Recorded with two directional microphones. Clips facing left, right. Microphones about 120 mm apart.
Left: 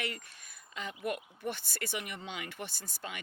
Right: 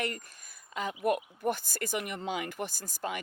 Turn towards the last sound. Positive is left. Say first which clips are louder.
# right 8 dB
turn(degrees=-40)  # may be behind; listen again after turning